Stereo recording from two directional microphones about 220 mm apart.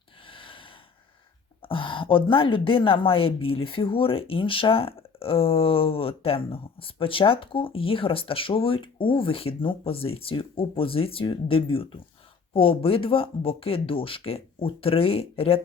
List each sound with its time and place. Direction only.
0.3 s gasp: 25° left (ahead or behind)
1.6 s a woman's voice: 25° left (ahead or behind)